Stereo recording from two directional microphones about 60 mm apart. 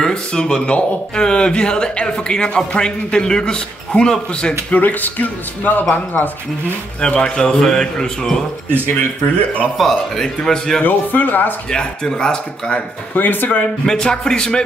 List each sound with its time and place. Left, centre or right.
0.0 s a man's voice: centre
4.7 s speech: left
7.0 s a man's voice: centre
9.8 s a man's voice: centre
10.8 s speech: left
11.7 s a man's voice: centre
13.1 s speech: left
13.8 s a man's voice: centre